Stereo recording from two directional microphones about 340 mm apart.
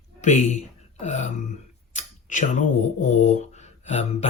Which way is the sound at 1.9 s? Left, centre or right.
Left.